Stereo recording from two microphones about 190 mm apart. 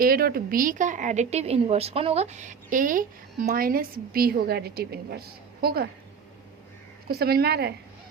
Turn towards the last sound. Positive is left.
turn(degrees=-55)  # may be behind; listen again after turning